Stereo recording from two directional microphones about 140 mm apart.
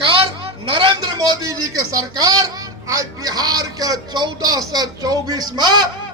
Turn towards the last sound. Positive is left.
turn(degrees=-30)  # may be behind; listen again after turning